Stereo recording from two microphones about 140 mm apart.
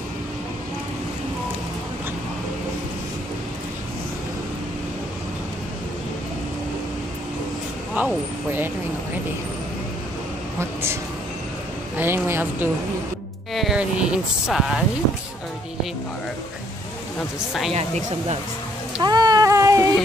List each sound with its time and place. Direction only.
7.9 s speech: 15° right (ahead or behind)
10.6 s speech: 15° right (ahead or behind)
12.0 s a woman's voice: 15° right (ahead or behind)
13.5 s speech: centre (ahead or behind)
17.7 s speech: 50° right (ahead or behind)
19.0 s cat: 30° right (ahead or behind)